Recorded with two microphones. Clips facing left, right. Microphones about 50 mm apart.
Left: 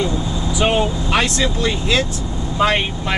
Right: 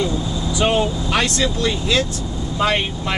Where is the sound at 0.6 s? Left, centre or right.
Centre.